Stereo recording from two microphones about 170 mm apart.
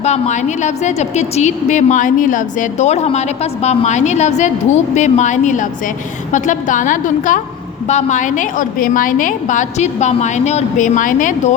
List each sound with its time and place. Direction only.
0.0 s a woman's voice: 40° left (ahead or behind)